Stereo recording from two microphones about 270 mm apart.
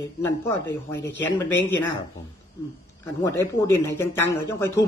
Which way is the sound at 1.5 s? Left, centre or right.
Centre.